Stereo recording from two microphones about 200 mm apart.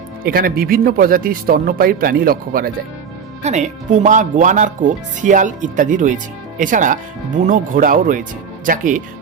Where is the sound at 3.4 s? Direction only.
35° right (ahead or behind).